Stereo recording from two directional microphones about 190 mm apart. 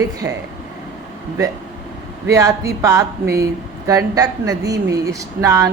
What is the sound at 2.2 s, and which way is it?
Speech, 15° right (ahead or behind).